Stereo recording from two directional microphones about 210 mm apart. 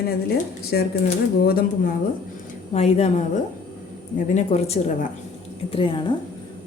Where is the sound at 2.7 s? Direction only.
30° left (ahead or behind).